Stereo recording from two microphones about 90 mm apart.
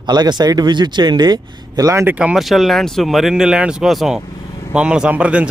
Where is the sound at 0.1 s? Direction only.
55° right (ahead or behind).